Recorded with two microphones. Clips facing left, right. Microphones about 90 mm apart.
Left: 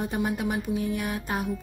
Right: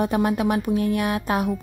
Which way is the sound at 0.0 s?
75° right (ahead or behind).